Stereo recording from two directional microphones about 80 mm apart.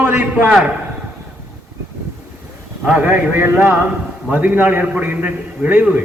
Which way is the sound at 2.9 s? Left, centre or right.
Centre.